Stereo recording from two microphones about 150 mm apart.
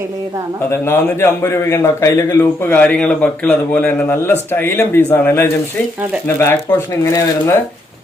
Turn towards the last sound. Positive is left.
turn(degrees=20)  # may be behind; listen again after turning